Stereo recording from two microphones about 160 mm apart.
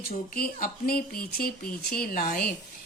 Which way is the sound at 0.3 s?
70° left (ahead or behind).